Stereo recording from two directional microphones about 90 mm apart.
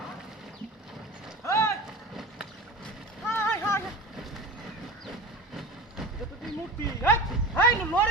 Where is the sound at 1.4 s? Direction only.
30° left (ahead or behind).